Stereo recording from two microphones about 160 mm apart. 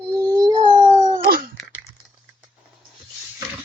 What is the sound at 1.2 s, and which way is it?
Babbling, 70° right (ahead or behind).